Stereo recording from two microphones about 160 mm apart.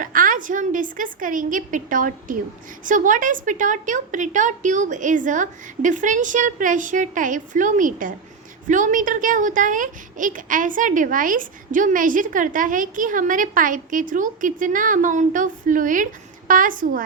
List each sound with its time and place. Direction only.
0.0 s a woman's voice: 60° right (ahead or behind)